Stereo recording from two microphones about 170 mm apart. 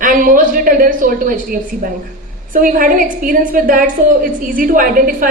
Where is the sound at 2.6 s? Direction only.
55° right (ahead or behind).